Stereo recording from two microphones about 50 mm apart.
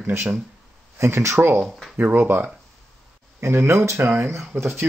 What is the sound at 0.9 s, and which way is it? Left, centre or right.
Speech, right.